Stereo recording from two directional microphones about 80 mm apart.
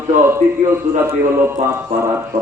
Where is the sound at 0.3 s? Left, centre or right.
Right.